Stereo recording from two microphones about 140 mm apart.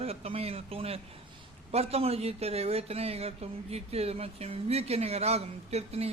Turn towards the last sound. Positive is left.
turn(degrees=-50)  # may be behind; listen again after turning